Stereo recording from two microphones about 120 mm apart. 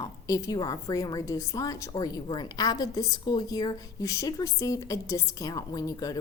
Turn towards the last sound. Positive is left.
turn(degrees=30)  # may be behind; listen again after turning